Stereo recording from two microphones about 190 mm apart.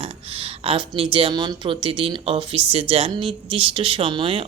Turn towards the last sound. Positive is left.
turn(degrees=-30)  # may be behind; listen again after turning